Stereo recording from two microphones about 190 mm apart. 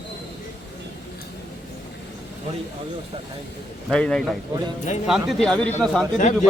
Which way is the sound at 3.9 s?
5° left (ahead or behind).